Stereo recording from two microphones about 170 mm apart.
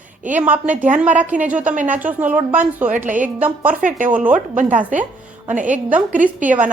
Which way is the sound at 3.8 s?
50° right (ahead or behind).